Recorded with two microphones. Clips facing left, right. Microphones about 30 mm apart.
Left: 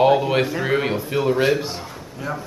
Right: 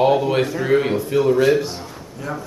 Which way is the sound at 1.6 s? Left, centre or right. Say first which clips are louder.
Right 2 dB; centre.